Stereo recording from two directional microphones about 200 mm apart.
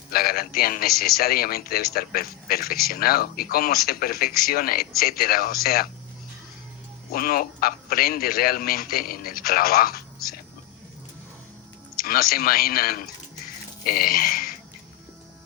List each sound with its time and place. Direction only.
0.1 s a man's voice: 50° left (ahead or behind)
7.1 s a man's voice: 45° left (ahead or behind)
11.9 s a man's voice: 50° left (ahead or behind)